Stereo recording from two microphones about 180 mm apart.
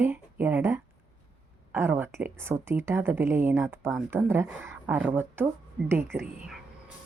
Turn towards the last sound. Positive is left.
turn(degrees=-10)  # may be behind; listen again after turning